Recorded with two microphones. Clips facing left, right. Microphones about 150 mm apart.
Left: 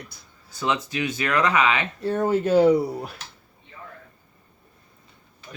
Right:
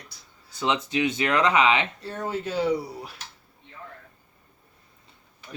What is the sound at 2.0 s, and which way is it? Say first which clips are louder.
Speech: left 9 dB; 50° left (ahead or behind).